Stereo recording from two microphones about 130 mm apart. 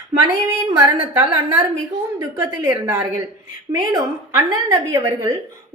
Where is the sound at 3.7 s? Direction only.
25° right (ahead or behind).